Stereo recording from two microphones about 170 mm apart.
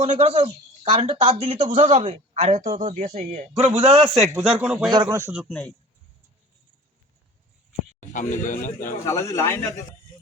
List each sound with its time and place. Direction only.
0.0 s speech: 40° right (ahead or behind)
1.3 s speech: 40° right (ahead or behind)
4.4 s speech: 5° right (ahead or behind)
4.9 s speech: 25° right (ahead or behind)
5.2 s speech: 5° right (ahead or behind)
8.1 s speech: 50° left (ahead or behind)
9.0 s speech: 15° left (ahead or behind)